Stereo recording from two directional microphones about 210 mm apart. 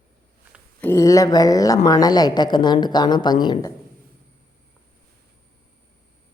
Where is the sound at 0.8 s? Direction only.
15° left (ahead or behind).